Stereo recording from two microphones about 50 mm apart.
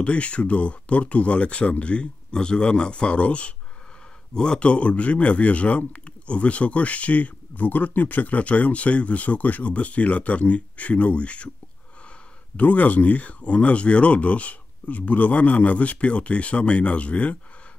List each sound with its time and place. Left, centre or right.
0.0 s speech: left
12.5 s speech: left